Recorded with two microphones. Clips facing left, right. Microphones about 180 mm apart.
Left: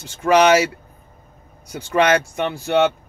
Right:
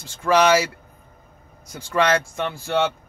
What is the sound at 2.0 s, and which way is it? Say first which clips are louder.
Speech: left 3 dB; 20° left (ahead or behind).